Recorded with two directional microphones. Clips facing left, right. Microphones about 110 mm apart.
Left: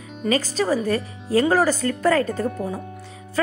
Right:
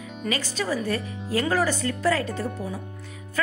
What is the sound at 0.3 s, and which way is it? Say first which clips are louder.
Speech: left 7 dB; 40° left (ahead or behind).